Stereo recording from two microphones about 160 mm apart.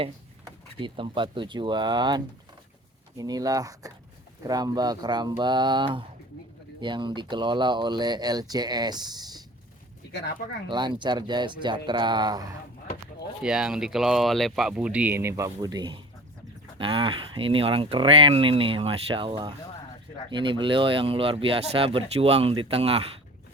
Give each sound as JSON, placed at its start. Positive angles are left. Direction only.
{"t": 0.4, "sound": "speech", "side_deg": -30}
{"t": 10.1, "sound": "speech", "side_deg": 90}
{"t": 10.7, "sound": "speech", "side_deg": -30}
{"t": 13.4, "sound": "speech", "side_deg": -5}